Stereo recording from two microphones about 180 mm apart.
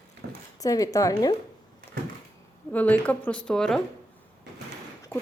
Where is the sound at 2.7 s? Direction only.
10° left (ahead or behind).